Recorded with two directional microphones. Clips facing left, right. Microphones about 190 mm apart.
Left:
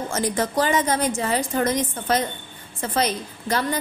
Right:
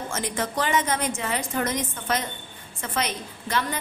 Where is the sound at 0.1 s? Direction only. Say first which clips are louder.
Left 6 dB; 35° left (ahead or behind).